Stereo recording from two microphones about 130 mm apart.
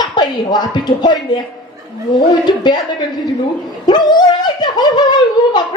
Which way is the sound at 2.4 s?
35° left (ahead or behind).